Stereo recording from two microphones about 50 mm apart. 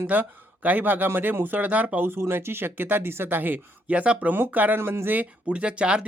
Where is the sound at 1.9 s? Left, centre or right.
Right.